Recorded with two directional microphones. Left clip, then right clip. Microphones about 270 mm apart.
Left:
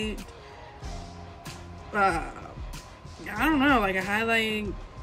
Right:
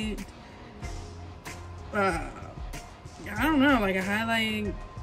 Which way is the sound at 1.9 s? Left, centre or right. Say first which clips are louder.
Left 3 dB; centre.